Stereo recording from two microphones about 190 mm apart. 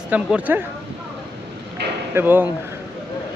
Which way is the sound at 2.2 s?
10° right (ahead or behind).